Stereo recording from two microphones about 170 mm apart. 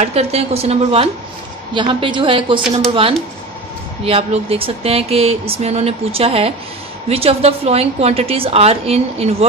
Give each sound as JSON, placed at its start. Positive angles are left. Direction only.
{"t": 0.0, "sound": "a woman's voice", "side_deg": -40}